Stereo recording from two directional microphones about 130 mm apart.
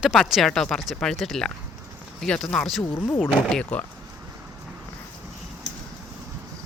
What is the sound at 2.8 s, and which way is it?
Speech, 20° left (ahead or behind).